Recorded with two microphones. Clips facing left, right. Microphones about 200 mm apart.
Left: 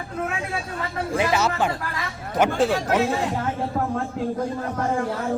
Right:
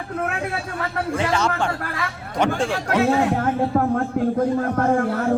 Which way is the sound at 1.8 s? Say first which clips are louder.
Right 3 dB; 60° right (ahead or behind).